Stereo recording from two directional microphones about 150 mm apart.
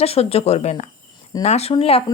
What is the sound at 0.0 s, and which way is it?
A woman's voice, 40° left (ahead or behind).